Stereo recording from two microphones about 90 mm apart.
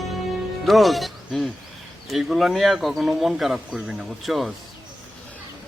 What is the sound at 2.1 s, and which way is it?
Speech, centre (ahead or behind).